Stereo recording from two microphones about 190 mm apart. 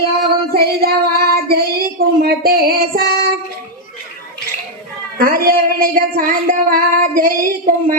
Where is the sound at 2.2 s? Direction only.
50° right (ahead or behind).